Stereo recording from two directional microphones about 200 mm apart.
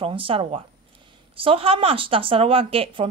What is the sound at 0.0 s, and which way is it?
A woman's voice, 25° right (ahead or behind).